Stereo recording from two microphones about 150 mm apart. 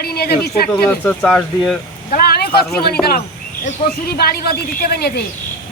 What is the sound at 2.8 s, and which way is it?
A man's voice, 90° left.